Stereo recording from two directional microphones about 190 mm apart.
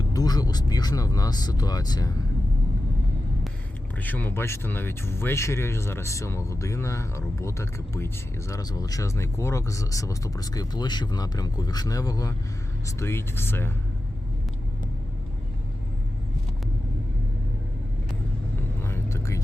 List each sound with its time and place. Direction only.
0.0 s speech: 20° left (ahead or behind)
3.9 s speech: 10° left (ahead or behind)
18.9 s whispering: 15° left (ahead or behind)